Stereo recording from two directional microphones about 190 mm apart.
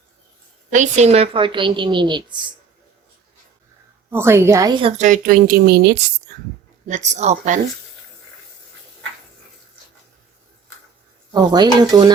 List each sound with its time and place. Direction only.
0.7 s a woman's voice: 40° right (ahead or behind)
4.1 s a woman's voice: 15° right (ahead or behind)
4.8 s speech: 35° right (ahead or behind); by 6.0 s 55° right (ahead or behind)
6.8 s a woman's voice: 40° right (ahead or behind)
11.3 s a woman's voice: 20° right (ahead or behind)